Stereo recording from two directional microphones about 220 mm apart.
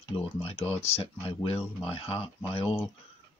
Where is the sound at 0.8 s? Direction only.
25° left (ahead or behind).